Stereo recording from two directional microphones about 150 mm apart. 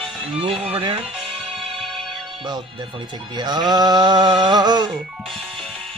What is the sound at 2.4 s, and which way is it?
Speech, 30° right (ahead or behind).